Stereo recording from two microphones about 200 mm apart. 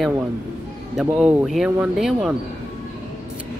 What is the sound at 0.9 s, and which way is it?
Speech, 5° right (ahead or behind).